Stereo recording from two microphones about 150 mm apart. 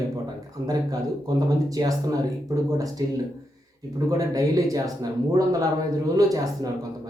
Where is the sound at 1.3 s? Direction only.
25° right (ahead or behind).